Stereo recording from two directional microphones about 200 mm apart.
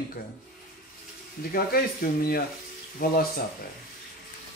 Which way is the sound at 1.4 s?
45° left (ahead or behind).